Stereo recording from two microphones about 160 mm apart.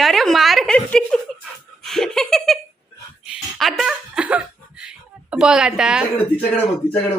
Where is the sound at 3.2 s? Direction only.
Centre (ahead or behind).